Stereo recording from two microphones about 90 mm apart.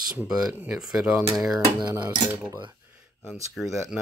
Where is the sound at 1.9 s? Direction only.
30° right (ahead or behind).